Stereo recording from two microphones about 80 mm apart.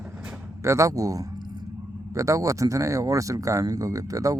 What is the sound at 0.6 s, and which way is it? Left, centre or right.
Speech, right.